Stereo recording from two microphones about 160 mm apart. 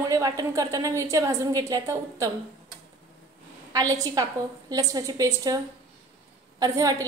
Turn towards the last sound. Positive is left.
turn(degrees=-20)  # may be behind; listen again after turning